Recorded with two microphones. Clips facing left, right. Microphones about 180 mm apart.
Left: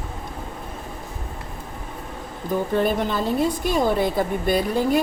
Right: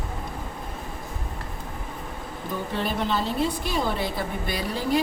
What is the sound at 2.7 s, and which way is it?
A woman's voice, 50° left (ahead or behind).